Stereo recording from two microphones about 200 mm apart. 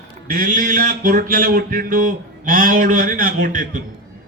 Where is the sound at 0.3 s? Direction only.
40° right (ahead or behind).